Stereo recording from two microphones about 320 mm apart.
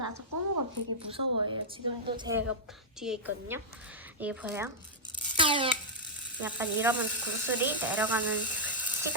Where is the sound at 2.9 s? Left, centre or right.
Centre.